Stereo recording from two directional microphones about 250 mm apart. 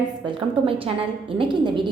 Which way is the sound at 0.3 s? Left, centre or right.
Right.